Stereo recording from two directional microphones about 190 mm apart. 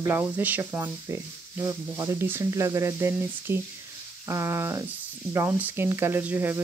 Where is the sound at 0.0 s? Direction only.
10° right (ahead or behind).